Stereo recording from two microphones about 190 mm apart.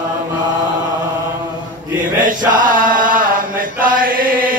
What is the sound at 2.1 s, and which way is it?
Chant, 45° right (ahead or behind).